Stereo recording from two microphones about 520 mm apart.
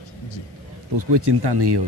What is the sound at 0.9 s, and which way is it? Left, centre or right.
Speech, right.